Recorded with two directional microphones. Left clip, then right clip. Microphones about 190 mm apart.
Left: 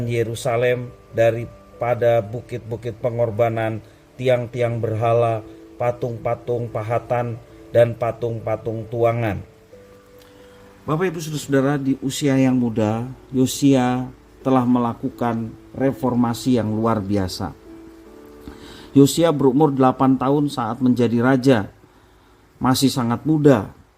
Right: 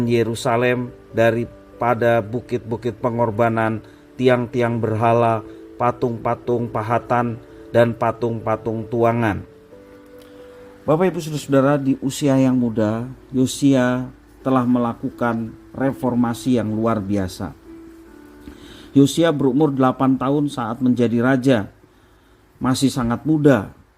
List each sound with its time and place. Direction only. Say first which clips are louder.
0.1 s a man's voice: right 2 dB; 30° right (ahead or behind)
10.8 s a man's voice: right 5 dB; 15° right (ahead or behind)
12.4 s a man's voice: right 1 dB; centre (ahead or behind)
18.9 s a man's voice: left 1 dB; centre (ahead or behind)